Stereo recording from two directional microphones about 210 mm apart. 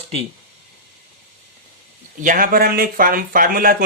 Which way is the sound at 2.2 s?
40° right (ahead or behind).